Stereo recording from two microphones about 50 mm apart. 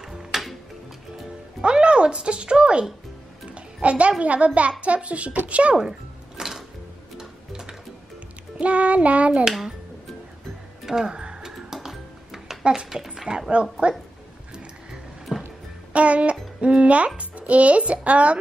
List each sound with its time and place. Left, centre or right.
0.1 s music: centre
1.6 s speech: centre
3.5 s music: right
4.2 s a child's voice: right
5.8 s music: centre
8.5 s a child's voice: right
9.4 s speech: centre
10.9 s music: centre
12.6 s speech: centre
13.5 s a child's voice: right
15.3 s music: centre
15.9 s music: right
16.6 s a child's voice: right